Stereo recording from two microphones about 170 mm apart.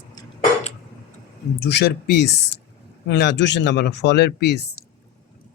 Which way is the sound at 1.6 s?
75° left (ahead or behind).